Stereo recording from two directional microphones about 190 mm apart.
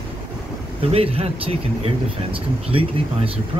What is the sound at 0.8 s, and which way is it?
Speech, 30° right (ahead or behind).